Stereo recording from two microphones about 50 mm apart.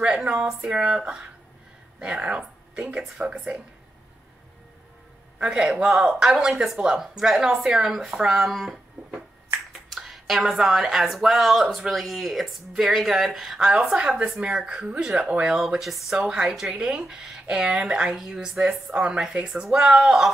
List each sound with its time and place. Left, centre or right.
0.0 s a woman's voice: right
5.4 s speech: centre
9.7 s finger snapping: centre
10.4 s speech: centre
13.7 s a woman's voice: centre
15.5 s speech: centre
15.8 s speech: centre
16.2 s speech: centre